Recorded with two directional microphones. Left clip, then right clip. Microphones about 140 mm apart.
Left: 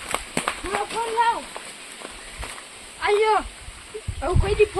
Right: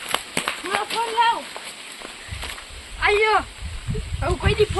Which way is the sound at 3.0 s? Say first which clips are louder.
Right 2 dB; 15° left (ahead or behind).